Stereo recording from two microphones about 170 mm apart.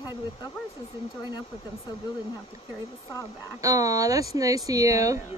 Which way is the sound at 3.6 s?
20° right (ahead or behind).